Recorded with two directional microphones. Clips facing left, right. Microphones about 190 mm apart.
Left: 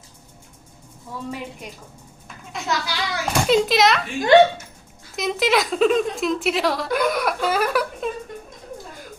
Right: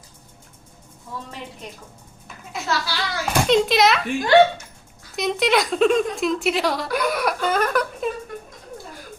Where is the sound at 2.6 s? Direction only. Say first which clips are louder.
Even; 15° left (ahead or behind).